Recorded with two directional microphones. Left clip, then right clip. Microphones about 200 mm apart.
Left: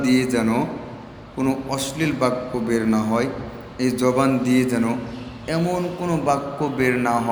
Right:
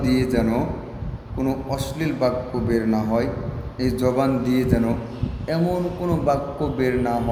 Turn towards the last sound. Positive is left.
turn(degrees=-10)  # may be behind; listen again after turning